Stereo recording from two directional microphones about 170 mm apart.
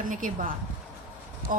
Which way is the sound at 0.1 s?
50° right (ahead or behind).